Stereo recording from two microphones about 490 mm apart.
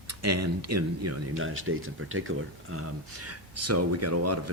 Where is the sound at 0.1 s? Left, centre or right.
Right.